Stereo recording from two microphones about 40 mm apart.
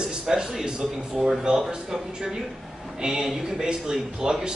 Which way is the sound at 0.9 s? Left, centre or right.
Right.